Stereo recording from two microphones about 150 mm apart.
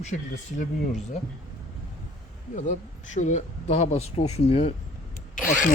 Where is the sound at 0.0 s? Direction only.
55° left (ahead or behind).